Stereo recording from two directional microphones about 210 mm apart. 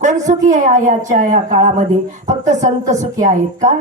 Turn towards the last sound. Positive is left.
turn(degrees=-35)  # may be behind; listen again after turning